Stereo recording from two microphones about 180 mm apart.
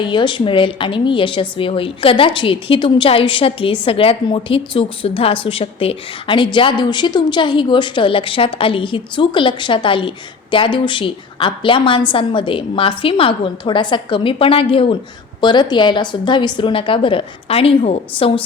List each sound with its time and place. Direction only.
0.0 s a woman's voice: 25° left (ahead or behind)